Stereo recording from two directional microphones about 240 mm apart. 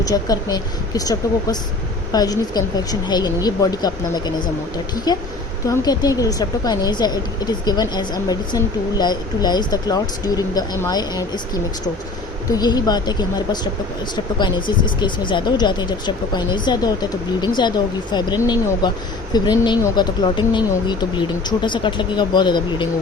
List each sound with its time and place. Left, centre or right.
0.0 s a woman's voice: centre